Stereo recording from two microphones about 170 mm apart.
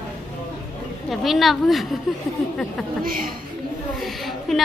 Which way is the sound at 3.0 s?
55° right (ahead or behind).